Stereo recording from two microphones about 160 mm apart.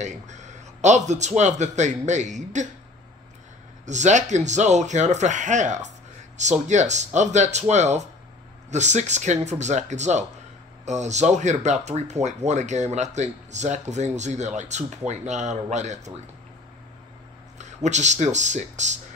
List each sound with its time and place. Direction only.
0.0 s speech: 45° right (ahead or behind)
3.8 s speech: 50° right (ahead or behind)
17.6 s speech: 45° right (ahead or behind)